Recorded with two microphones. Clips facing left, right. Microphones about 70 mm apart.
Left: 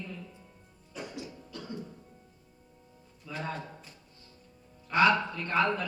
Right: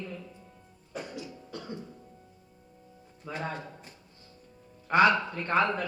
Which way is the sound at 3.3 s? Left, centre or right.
Right.